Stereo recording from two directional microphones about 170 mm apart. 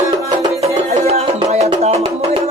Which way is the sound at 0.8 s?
40° right (ahead or behind).